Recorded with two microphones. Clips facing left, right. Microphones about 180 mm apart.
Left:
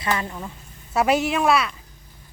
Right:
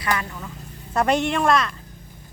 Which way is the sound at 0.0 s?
25° left (ahead or behind).